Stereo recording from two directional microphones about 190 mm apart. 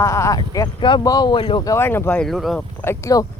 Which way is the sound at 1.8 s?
10° left (ahead or behind).